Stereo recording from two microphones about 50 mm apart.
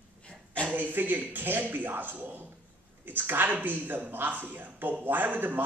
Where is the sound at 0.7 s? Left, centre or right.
Right.